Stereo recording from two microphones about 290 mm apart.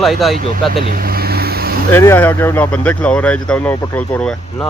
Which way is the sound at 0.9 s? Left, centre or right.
Right.